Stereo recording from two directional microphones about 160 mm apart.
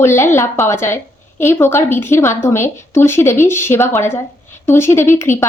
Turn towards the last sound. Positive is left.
turn(degrees=15)  # may be behind; listen again after turning